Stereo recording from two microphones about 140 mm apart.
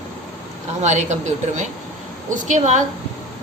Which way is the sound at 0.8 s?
55° right (ahead or behind).